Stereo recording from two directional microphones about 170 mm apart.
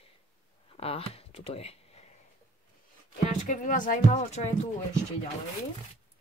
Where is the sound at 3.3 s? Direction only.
50° left (ahead or behind).